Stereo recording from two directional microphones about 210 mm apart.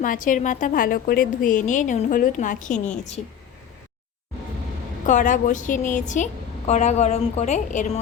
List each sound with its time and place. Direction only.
0.0 s a woman's voice: 40° left (ahead or behind)
5.0 s a woman's voice: 35° left (ahead or behind)